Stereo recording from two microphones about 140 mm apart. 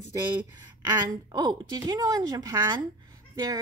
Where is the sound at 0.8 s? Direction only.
30° right (ahead or behind).